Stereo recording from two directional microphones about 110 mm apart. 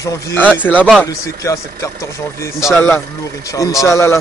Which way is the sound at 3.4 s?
30° left (ahead or behind).